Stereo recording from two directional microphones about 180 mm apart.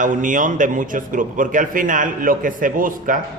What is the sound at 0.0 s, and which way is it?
Speech, 45° right (ahead or behind).